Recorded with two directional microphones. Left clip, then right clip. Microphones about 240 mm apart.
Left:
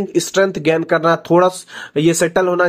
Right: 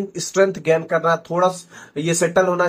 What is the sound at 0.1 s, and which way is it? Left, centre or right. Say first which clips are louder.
Speech: left 2 dB; left.